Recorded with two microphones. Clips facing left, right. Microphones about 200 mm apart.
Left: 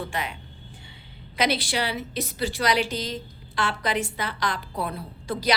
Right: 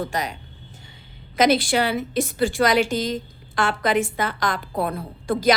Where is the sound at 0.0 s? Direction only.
40° right (ahead or behind).